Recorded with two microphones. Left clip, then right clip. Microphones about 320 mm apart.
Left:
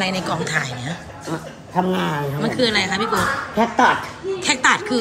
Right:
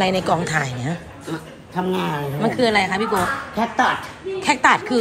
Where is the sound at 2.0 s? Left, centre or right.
Centre.